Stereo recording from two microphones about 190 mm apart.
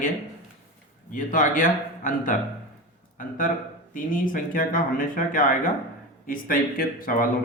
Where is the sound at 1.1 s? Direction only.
45° left (ahead or behind).